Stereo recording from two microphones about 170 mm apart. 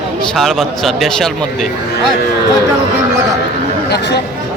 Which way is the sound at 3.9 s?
80° left.